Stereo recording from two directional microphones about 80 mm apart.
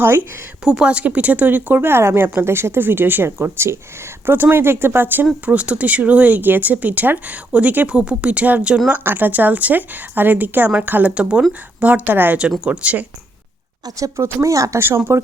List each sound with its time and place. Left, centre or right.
0.0 s speech: right
0.6 s speech: centre
12.4 s speech: centre
13.8 s speech: right